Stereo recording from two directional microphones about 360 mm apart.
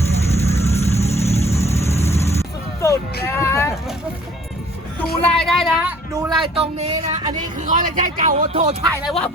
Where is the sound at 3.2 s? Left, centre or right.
Centre.